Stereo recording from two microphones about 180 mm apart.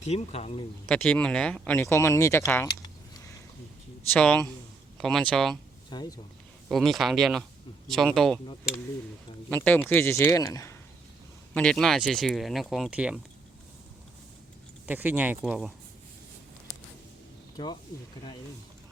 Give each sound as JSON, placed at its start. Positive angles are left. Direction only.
{"t": 0.0, "sound": "speech", "side_deg": 40}
{"t": 0.9, "sound": "speech", "side_deg": 5}
{"t": 4.1, "sound": "speech", "side_deg": 5}
{"t": 5.9, "sound": "speech", "side_deg": 25}
{"t": 6.7, "sound": "speech", "side_deg": 0}
{"t": 9.5, "sound": "speech", "side_deg": 10}
{"t": 11.5, "sound": "speech", "side_deg": 5}
{"t": 14.8, "sound": "speech", "side_deg": -10}